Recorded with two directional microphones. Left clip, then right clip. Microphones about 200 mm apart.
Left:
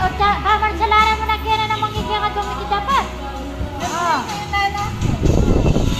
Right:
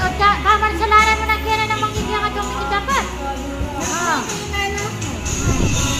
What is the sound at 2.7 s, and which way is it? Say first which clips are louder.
Music: left 2 dB; centre (ahead or behind).